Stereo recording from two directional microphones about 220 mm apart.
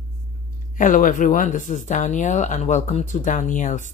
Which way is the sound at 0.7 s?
35° left (ahead or behind).